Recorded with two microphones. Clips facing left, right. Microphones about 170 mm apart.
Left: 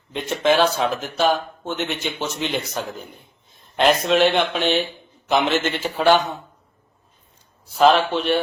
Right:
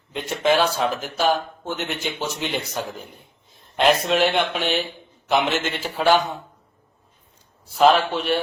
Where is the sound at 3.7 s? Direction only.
Centre (ahead or behind).